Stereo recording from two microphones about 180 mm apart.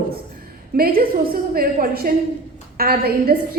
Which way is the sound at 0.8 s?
55° right (ahead or behind).